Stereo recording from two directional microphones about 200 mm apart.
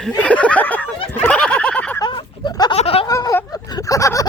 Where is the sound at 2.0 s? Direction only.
25° left (ahead or behind).